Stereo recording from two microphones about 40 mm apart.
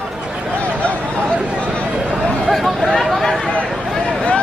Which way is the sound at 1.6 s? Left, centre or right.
Left.